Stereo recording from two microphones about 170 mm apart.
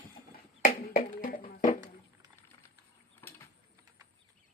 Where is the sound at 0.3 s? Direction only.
55° left (ahead or behind).